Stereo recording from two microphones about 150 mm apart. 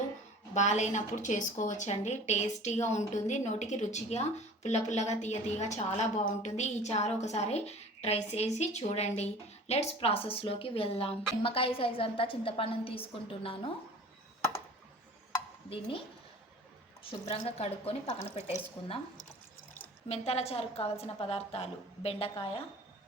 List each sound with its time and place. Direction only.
0.5 s a woman's voice: 50° left (ahead or behind)
17.1 s a woman's voice: 40° left (ahead or behind)
20.1 s a woman's voice: 45° left (ahead or behind)